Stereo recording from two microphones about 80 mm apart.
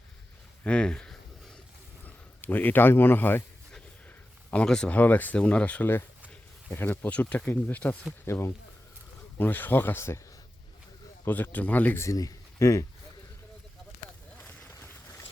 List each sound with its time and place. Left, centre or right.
0.6 s speech: centre
2.0 s speech: left
4.5 s speech: centre
8.2 s speech: left
9.4 s speech: left
11.3 s speech: left
12.1 s speech: left